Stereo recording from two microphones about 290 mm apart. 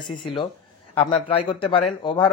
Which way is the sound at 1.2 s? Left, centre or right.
Centre.